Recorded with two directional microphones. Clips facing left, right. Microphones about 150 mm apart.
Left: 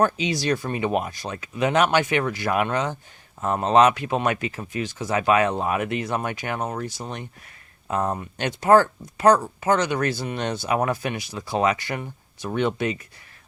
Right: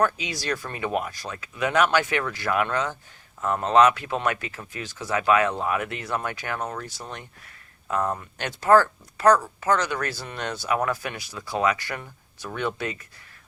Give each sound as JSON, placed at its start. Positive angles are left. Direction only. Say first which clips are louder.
{"t": 0.0, "sound": "speech", "louder": "left 3 dB", "side_deg": 25}